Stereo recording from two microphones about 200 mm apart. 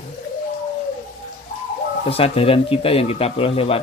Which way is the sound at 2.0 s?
30° left (ahead or behind).